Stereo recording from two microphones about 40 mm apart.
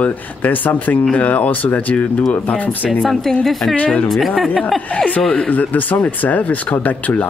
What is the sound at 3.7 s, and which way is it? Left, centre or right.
Speech, left.